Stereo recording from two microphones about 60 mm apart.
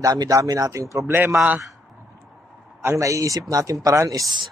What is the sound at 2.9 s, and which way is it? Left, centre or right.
Speech, right.